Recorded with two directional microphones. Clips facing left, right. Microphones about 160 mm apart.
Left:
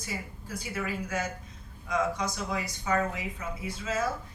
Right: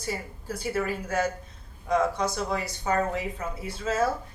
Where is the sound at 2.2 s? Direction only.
30° right (ahead or behind).